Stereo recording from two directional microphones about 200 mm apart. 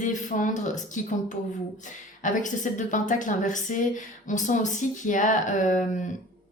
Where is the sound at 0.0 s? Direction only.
40° left (ahead or behind).